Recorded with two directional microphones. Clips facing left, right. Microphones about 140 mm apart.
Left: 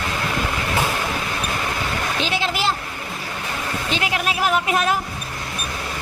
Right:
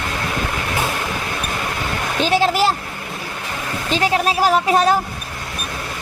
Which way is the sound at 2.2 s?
40° right (ahead or behind).